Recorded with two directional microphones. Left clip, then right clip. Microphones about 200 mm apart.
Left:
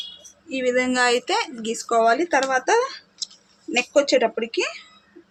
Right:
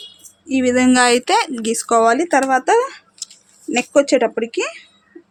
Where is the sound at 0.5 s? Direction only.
60° right (ahead or behind).